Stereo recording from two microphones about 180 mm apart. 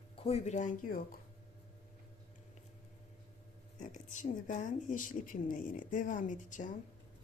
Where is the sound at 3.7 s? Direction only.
45° left (ahead or behind).